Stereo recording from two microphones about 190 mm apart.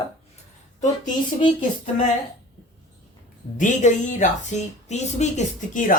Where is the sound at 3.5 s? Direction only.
40° left (ahead or behind).